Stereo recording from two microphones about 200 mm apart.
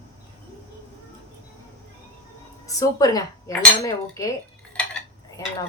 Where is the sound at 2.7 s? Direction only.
15° left (ahead or behind).